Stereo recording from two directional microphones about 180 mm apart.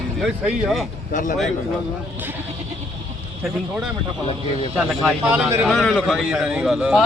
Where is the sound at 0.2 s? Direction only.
5° right (ahead or behind).